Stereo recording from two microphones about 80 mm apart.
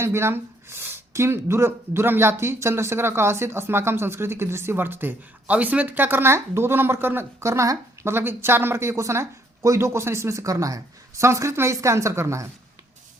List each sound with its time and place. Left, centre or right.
0.0 s speech: right